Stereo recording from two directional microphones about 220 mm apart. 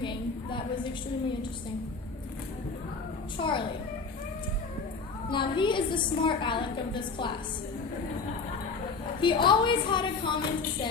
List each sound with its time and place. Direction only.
0.0 s a sound: 20° left (ahead or behind)
3.3 s a woman's voice: 20° left (ahead or behind)
5.3 s a woman's voice: 20° left (ahead or behind)
9.2 s a woman's voice: 20° left (ahead or behind)